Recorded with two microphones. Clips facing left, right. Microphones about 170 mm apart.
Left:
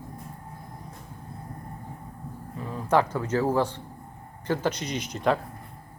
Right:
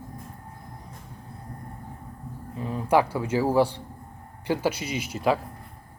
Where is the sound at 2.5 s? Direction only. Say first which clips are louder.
Right 2 dB; 20° right (ahead or behind).